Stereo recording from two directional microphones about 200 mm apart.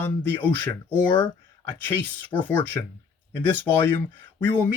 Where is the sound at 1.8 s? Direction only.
10° left (ahead or behind).